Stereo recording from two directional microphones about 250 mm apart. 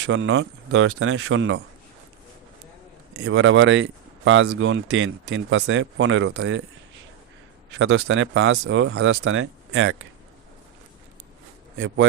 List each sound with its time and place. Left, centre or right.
0.0 s speech: right
3.2 s speech: right
7.7 s speech: right